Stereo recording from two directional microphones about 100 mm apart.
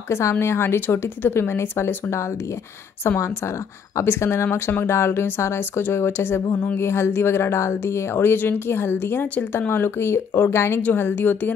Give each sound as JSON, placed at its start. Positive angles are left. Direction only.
{"t": 0.1, "sound": "speech", "side_deg": 30}